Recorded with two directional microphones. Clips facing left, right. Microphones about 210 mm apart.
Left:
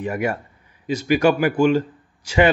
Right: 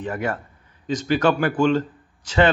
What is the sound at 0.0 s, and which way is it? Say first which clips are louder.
Speech: left 3 dB; 10° left (ahead or behind).